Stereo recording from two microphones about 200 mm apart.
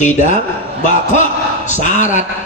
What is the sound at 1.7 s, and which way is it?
Speech, 40° left (ahead or behind).